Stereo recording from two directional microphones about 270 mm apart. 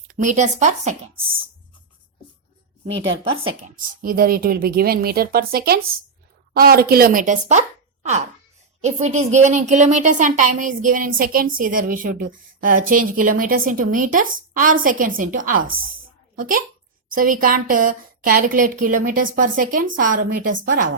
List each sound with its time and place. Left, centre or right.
0.1 s speech: right
4.0 s a woman's voice: right
8.8 s a woman's voice: right